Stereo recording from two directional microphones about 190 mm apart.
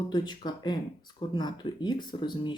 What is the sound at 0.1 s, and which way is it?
Speech, 20° left (ahead or behind).